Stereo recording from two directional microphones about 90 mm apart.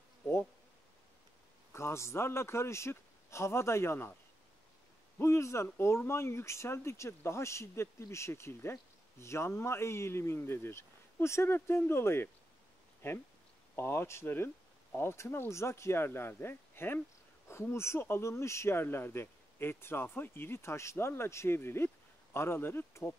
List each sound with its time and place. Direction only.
1.7 s speech: 30° left (ahead or behind)
5.2 s speech: 30° left (ahead or behind)
13.7 s speech: 25° left (ahead or behind)